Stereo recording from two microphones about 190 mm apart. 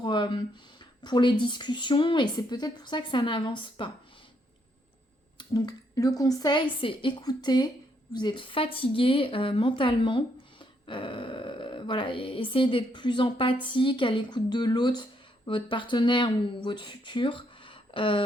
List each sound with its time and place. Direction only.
0.0 s speech: 25° left (ahead or behind)
5.4 s speech: 20° left (ahead or behind)